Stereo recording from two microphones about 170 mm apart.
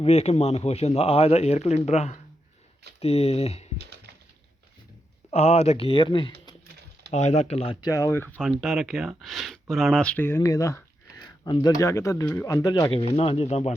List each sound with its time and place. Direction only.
0.0 s speech: 35° left (ahead or behind)
5.3 s speech: 40° left (ahead or behind)
7.1 s speech: 40° left (ahead or behind); by 8.4 s 15° left (ahead or behind)
8.4 s speech: centre (ahead or behind); by 13.7 s 40° left (ahead or behind)